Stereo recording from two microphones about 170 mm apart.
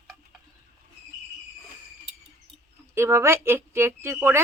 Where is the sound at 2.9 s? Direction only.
15° right (ahead or behind).